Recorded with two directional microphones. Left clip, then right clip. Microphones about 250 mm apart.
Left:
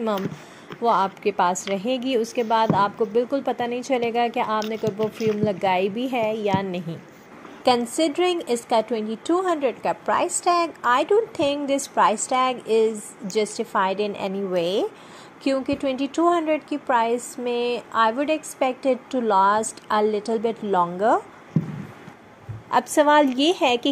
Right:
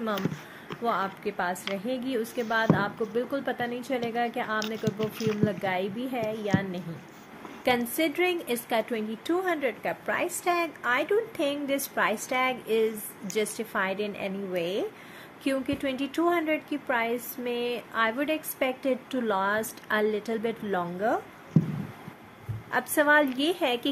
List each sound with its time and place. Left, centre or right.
0.1 s speech: centre
0.8 s a woman's voice: left
2.4 s speech: centre
3.2 s a woman's voice: centre
4.6 s speech: centre
5.4 s a woman's voice: centre
7.6 s a woman's voice: centre
21.5 s a sound: centre
22.7 s a woman's voice: centre